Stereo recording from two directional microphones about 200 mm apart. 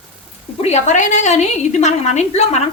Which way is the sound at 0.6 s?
35° left (ahead or behind).